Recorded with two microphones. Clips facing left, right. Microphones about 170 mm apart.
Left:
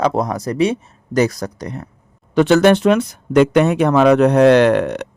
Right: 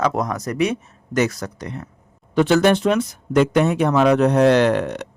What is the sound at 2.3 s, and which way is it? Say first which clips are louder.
Speech: left 4 dB; 70° left (ahead or behind).